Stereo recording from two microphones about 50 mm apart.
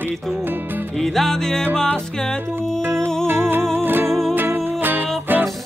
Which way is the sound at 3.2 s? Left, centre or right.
Right.